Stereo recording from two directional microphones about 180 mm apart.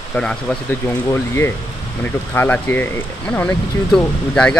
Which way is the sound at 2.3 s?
10° left (ahead or behind).